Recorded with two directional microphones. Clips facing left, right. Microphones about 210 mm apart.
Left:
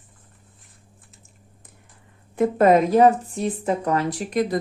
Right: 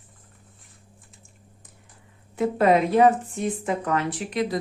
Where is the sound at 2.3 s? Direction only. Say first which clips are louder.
Left 3 dB; 45° left (ahead or behind).